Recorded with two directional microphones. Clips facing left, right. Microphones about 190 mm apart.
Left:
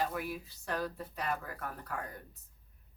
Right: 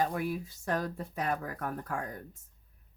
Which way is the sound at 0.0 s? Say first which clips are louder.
Right 4 dB; 50° right (ahead or behind).